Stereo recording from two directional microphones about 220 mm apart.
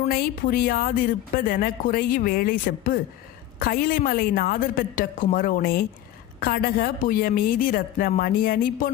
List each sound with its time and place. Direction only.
0.0 s a woman's voice: 40° left (ahead or behind)